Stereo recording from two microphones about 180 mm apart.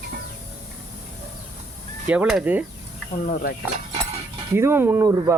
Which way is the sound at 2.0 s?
5° right (ahead or behind).